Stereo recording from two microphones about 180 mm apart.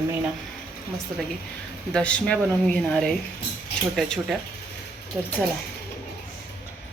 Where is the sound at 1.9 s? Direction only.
5° left (ahead or behind).